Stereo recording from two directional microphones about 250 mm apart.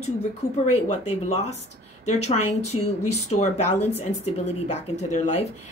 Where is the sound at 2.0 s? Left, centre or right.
Left.